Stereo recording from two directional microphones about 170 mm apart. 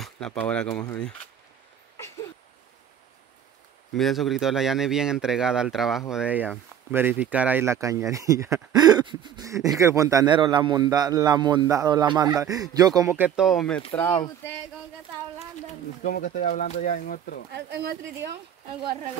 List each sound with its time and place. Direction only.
0.0 s speech: 5° left (ahead or behind)
3.9 s a man's voice: centre (ahead or behind)
16.0 s speech: 55° left (ahead or behind)
17.6 s speech: 75° right (ahead or behind)